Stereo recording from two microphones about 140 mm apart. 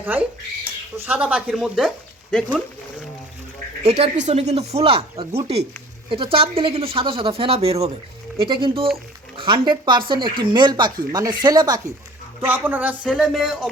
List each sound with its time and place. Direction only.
0.0 s speech: 15° right (ahead or behind)
3.8 s speech: 50° right (ahead or behind); by 11.8 s 30° right (ahead or behind)
12.4 s speech: 15° right (ahead or behind)